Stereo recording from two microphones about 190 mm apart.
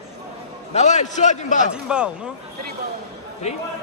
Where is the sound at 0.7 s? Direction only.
35° left (ahead or behind).